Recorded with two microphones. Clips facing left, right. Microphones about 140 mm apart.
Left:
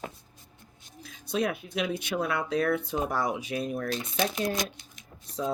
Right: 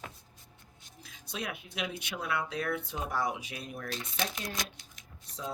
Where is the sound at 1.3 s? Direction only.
40° left (ahead or behind).